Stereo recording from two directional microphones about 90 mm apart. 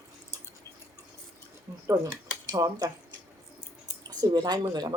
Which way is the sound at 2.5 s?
50° right (ahead or behind).